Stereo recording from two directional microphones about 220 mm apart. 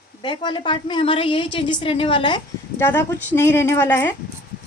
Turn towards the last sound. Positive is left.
turn(degrees=10)  # may be behind; listen again after turning